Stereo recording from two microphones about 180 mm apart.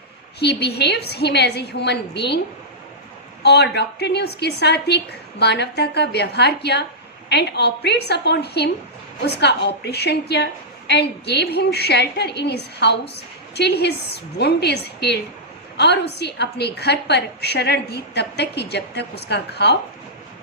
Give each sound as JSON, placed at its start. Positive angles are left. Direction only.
{"t": 0.3, "sound": "a woman's voice", "side_deg": 65}
{"t": 3.4, "sound": "a woman's voice", "side_deg": 65}